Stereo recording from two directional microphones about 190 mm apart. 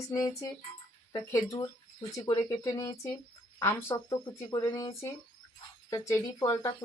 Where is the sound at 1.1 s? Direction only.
15° left (ahead or behind).